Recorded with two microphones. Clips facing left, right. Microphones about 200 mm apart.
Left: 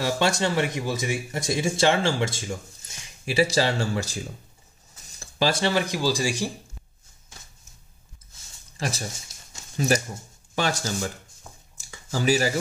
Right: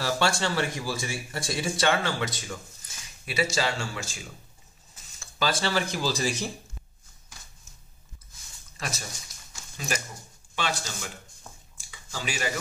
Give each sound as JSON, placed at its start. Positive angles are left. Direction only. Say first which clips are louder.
{"t": 0.0, "sound": "speech", "louder": "left 3 dB", "side_deg": 20}
{"t": 5.2, "sound": "speech", "louder": "left 4 dB", "side_deg": 25}
{"t": 8.7, "sound": "speech", "louder": "left 6 dB", "side_deg": 30}
{"t": 11.7, "sound": "a sound", "louder": "left 9 dB", "side_deg": 45}